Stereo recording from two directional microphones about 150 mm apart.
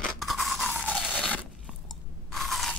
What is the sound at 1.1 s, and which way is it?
Zipper, 5° left (ahead or behind).